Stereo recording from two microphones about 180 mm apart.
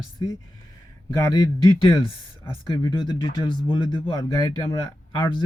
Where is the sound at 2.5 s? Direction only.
25° left (ahead or behind).